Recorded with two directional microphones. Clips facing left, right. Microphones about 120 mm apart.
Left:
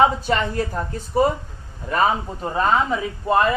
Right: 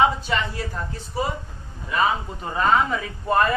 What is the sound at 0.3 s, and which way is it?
Speech, 45° left (ahead or behind).